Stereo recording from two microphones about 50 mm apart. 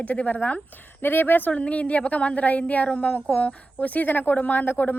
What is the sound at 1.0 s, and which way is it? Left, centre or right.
Speech, left.